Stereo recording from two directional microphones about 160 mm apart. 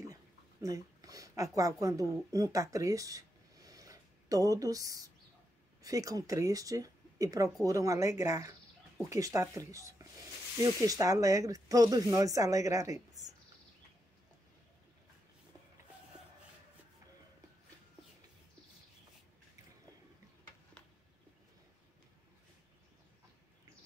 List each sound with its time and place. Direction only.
0.0 s speech: 20° right (ahead or behind)